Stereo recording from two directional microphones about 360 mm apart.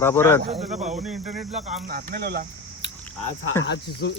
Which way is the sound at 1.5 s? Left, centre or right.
Centre.